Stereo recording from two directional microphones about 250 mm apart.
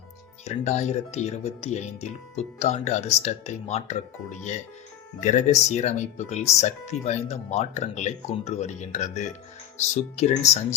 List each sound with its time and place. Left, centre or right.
0.4 s speech: left